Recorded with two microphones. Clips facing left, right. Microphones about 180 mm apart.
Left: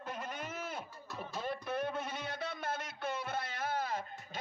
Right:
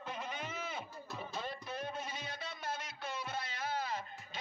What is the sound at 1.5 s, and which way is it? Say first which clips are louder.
Music: left 6 dB; 60° left (ahead or behind).